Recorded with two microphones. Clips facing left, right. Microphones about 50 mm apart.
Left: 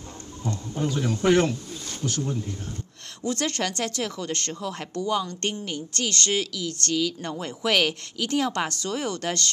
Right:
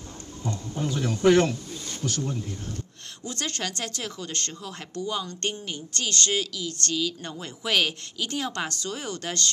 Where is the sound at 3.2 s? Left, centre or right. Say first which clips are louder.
Left 5 dB; left.